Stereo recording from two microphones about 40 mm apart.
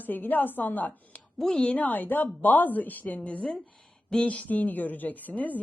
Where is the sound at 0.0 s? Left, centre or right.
Left.